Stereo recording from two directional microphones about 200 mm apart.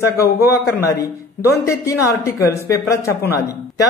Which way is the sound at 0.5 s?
15° left (ahead or behind).